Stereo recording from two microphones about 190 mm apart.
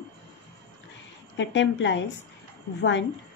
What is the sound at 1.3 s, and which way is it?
Speech, 70° left (ahead or behind).